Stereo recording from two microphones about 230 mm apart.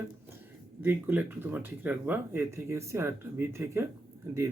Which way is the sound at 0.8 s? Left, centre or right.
Centre.